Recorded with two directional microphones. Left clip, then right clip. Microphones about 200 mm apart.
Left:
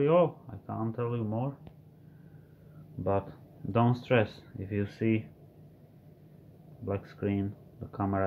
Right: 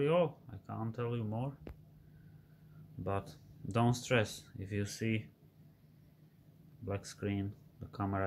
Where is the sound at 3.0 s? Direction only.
Centre (ahead or behind).